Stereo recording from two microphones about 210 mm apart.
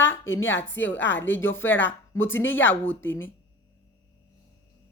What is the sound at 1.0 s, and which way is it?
Speech, 60° left (ahead or behind).